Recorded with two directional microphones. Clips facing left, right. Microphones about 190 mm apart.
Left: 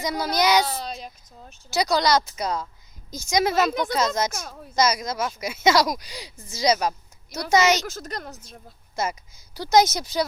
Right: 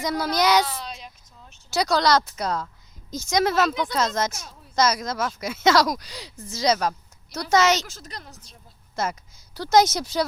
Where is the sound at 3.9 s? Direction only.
10° left (ahead or behind).